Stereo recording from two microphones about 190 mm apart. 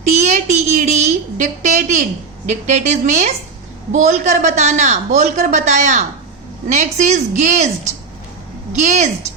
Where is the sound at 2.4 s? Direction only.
40° right (ahead or behind).